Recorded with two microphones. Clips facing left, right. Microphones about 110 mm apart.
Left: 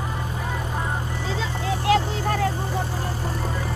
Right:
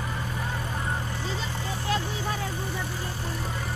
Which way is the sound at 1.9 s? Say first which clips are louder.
Left 8 dB; 65° left (ahead or behind).